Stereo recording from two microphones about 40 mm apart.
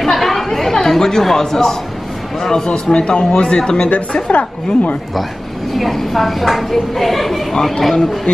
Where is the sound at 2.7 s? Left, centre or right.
Left.